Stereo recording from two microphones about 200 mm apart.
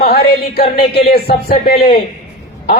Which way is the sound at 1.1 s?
50° left (ahead or behind).